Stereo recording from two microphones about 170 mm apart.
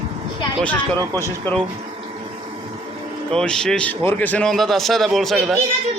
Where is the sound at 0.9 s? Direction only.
20° right (ahead or behind).